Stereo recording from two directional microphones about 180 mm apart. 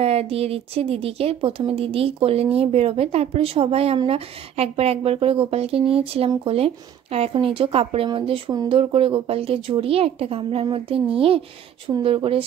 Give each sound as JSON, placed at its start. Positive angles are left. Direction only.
{"t": 0.0, "sound": "speech", "side_deg": -35}